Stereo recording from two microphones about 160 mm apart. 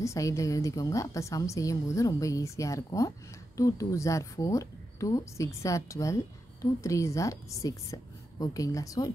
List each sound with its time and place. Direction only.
0.0 s a woman's voice: 20° left (ahead or behind)